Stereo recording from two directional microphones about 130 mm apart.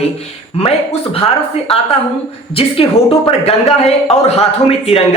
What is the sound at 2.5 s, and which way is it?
Speech, 45° left (ahead or behind).